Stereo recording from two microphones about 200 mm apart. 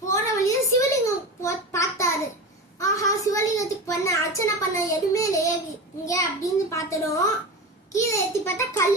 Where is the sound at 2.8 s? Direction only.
15° left (ahead or behind).